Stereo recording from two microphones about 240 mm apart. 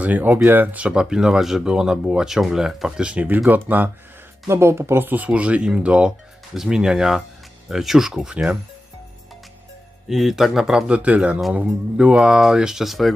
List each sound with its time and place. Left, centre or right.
0.0 s speech: centre
10.1 s speech: centre